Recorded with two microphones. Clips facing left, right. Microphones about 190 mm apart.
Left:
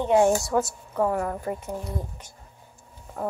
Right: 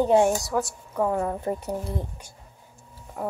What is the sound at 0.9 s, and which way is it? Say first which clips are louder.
Speech: even; 10° right (ahead or behind).